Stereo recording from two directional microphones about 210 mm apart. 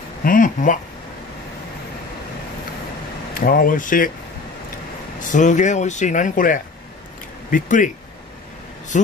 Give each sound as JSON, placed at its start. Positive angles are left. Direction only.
{"t": 0.2, "sound": "speech", "side_deg": 40}
{"t": 3.3, "sound": "speech", "side_deg": 45}
{"t": 5.2, "sound": "speech", "side_deg": 35}
{"t": 8.9, "sound": "speech", "side_deg": 35}